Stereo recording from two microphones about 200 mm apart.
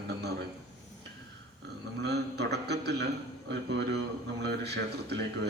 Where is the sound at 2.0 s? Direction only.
55° right (ahead or behind).